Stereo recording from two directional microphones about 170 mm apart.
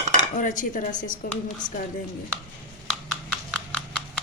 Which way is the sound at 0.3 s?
50° left (ahead or behind).